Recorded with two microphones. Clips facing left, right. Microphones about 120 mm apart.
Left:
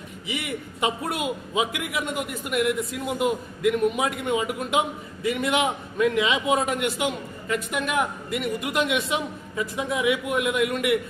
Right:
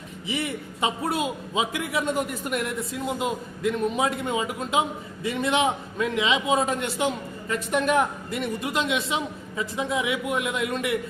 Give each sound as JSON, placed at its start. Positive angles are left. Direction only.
{"t": 0.3, "sound": "a man's voice", "side_deg": -35}
{"t": 2.9, "sound": "a man's voice", "side_deg": -25}